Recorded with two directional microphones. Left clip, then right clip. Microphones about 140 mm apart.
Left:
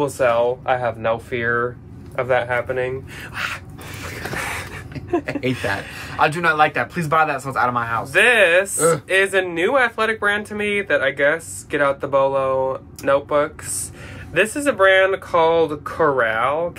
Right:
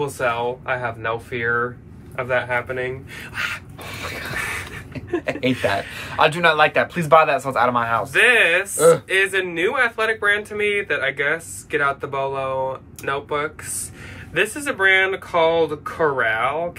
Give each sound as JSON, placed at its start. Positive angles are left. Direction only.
{"t": 0.2, "sound": "speech", "side_deg": 40}
{"t": 4.4, "sound": "a sound", "side_deg": 40}
{"t": 5.2, "sound": "a man's voice", "side_deg": -20}
{"t": 8.1, "sound": "speech", "side_deg": 40}
{"t": 8.7, "sound": "a man's voice", "side_deg": -20}
{"t": 9.1, "sound": "speech", "side_deg": 40}